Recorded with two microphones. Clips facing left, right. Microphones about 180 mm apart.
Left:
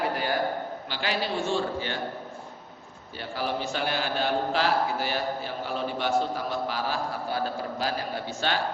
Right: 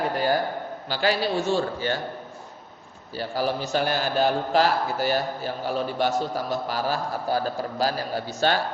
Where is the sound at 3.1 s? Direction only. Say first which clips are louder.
Right 5 dB; 40° right (ahead or behind).